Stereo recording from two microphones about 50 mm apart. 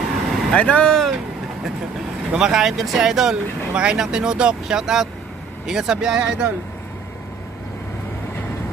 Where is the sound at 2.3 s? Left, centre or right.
Centre.